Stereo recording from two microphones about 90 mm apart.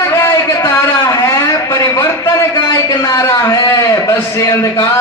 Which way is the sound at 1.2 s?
35° left (ahead or behind).